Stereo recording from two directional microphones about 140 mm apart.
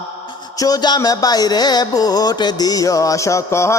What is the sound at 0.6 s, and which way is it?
Music, 30° left (ahead or behind).